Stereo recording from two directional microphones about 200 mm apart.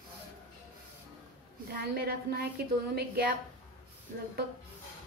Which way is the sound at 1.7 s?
50° right (ahead or behind).